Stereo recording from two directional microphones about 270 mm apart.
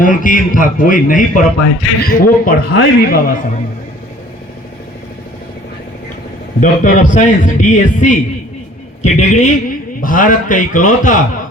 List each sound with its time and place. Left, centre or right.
0.0 s a man's voice: left
6.6 s a man's voice: left